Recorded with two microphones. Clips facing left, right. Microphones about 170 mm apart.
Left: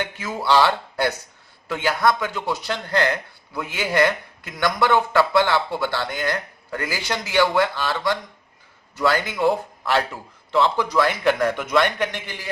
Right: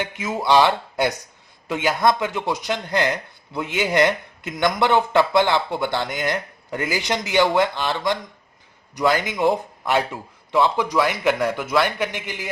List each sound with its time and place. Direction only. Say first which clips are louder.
0.0 s a man's voice: right 2 dB; 15° right (ahead or behind)